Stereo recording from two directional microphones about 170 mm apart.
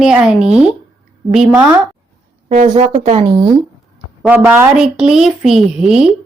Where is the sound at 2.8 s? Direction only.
35° right (ahead or behind).